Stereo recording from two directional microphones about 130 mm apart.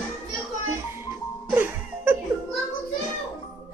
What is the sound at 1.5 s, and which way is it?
Music, 15° right (ahead or behind).